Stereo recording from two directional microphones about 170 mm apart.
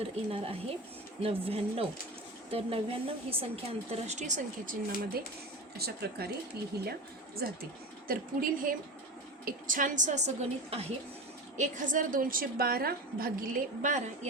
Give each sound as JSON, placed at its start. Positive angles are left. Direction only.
{"t": 0.0, "sound": "speech", "side_deg": -35}
{"t": 5.7, "sound": "a woman's voice", "side_deg": -65}
{"t": 11.5, "sound": "a woman's voice", "side_deg": -50}